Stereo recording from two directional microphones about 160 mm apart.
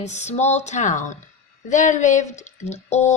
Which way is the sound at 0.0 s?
45° left (ahead or behind).